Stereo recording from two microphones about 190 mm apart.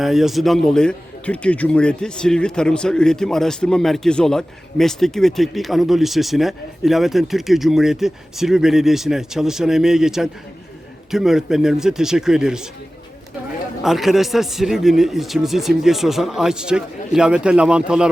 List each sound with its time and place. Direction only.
0.0 s a man's voice: centre (ahead or behind)
13.8 s a man's voice: centre (ahead or behind)